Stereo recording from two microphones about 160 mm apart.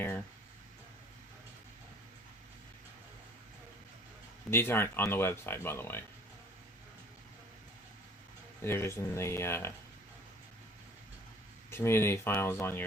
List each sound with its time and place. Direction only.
4.5 s speech: 15° left (ahead or behind)
8.6 s speech: 15° left (ahead or behind)
11.7 s speech: 15° left (ahead or behind)